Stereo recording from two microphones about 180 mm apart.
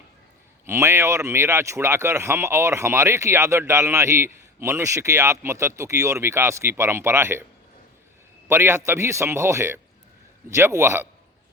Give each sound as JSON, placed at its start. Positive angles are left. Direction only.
{"t": 0.6, "sound": "speech", "side_deg": -15}
{"t": 8.4, "sound": "speech", "side_deg": -15}